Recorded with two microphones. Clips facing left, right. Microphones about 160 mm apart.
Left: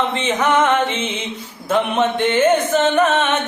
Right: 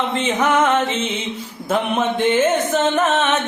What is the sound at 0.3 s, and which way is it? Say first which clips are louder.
Music: left 1 dB; 10° right (ahead or behind).